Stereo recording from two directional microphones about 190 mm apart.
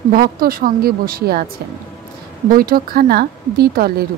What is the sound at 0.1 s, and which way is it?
Speech, 50° right (ahead or behind).